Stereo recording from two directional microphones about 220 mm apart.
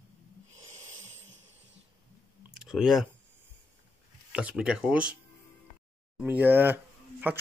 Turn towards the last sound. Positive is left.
turn(degrees=-10)  # may be behind; listen again after turning